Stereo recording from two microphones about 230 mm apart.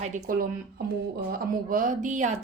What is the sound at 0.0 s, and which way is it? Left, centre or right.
Speech, right.